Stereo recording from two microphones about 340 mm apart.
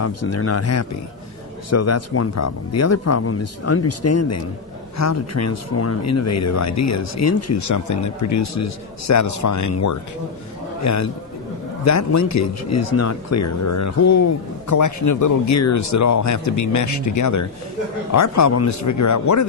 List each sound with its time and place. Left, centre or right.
0.0 s a man's voice: left